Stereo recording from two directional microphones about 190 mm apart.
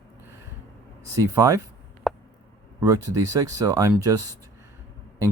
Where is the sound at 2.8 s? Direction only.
20° right (ahead or behind).